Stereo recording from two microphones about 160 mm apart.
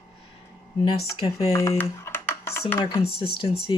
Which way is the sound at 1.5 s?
20° left (ahead or behind).